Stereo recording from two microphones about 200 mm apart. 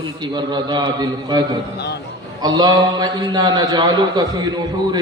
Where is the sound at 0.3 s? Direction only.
20° right (ahead or behind).